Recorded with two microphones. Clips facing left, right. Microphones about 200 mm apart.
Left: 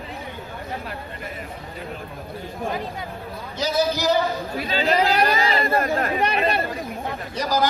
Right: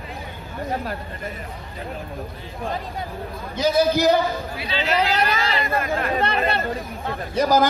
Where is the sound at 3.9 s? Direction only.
55° right (ahead or behind).